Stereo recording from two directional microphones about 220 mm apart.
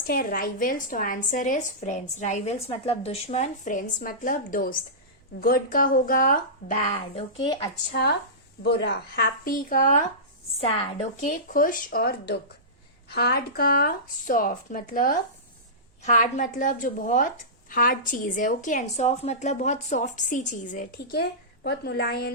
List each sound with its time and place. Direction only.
0.1 s a woman's voice: 40° left (ahead or behind); by 7.7 s 20° left (ahead or behind)
8.6 s a woman's voice: 50° left (ahead or behind)